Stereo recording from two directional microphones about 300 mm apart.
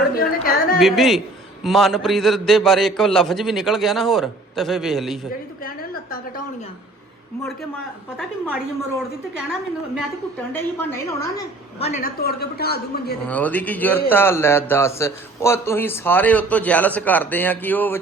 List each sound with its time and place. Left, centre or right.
0.2 s yodeling: left
0.8 s a man's voice: centre
5.6 s a sound: left
10.5 s a man's voice: centre
11.9 s a woman's voice: left
13.2 s a man's voice: centre